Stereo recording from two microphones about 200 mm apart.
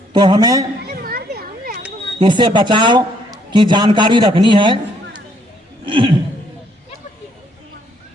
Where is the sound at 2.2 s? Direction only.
25° right (ahead or behind).